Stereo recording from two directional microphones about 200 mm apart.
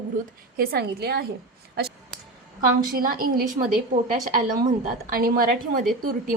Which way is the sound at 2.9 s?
45° right (ahead or behind).